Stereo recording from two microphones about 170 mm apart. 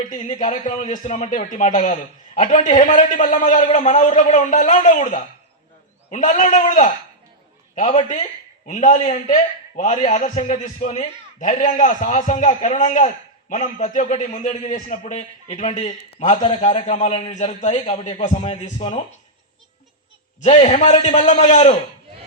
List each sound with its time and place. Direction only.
0.1 s a man's voice: 45° left (ahead or behind)
20.4 s a man's voice: 40° left (ahead or behind)